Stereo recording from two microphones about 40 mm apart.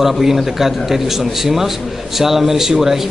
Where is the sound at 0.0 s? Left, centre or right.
Centre.